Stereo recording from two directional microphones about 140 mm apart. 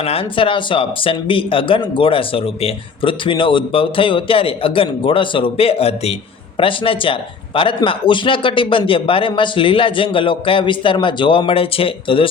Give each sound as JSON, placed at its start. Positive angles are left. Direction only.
{"t": 0.0, "sound": "speech", "side_deg": 45}